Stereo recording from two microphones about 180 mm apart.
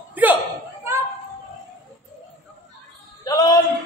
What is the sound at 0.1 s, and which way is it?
Hiccup, 10° right (ahead or behind).